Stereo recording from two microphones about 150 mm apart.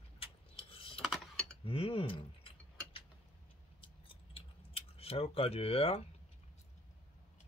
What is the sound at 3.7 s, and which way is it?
Keys jangling, 35° left (ahead or behind).